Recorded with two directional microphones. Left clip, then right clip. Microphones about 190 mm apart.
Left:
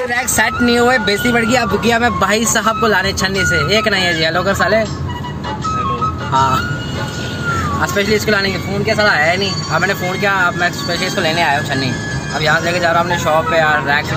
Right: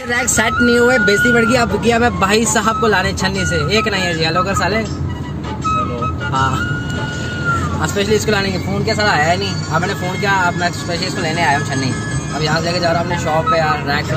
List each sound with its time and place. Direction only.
0.1 s speech: centre (ahead or behind)
1.6 s speech: 15° left (ahead or behind)
6.3 s speech: 20° left (ahead or behind)
7.8 s speech: centre (ahead or behind)